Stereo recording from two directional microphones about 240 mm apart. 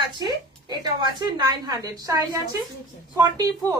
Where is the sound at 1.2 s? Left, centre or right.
Centre.